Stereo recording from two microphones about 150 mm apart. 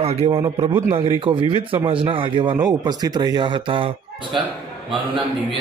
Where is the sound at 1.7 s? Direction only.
35° right (ahead or behind).